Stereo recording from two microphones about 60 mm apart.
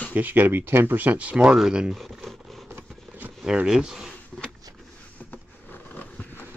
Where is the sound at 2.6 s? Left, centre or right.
Right.